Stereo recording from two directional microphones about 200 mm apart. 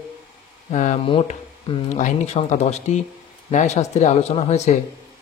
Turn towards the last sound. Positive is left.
turn(degrees=35)  # may be behind; listen again after turning